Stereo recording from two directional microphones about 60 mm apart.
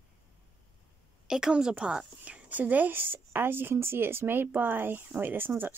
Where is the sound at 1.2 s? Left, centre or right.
Centre.